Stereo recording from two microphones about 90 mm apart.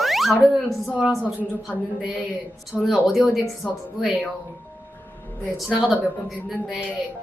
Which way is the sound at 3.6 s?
20° left (ahead or behind).